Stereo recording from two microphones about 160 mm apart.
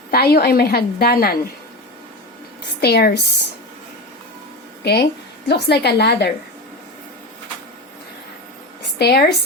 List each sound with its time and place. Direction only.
0.1 s a woman's voice: 80° left
2.8 s a woman's voice: 85° left
4.8 s a woman's voice: 90° left
9.0 s speech: 90° left